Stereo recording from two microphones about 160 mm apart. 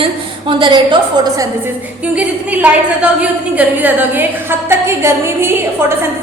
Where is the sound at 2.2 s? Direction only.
10° right (ahead or behind).